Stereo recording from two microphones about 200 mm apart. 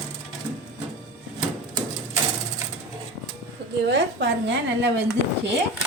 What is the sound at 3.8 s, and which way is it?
Speech, 60° right (ahead or behind).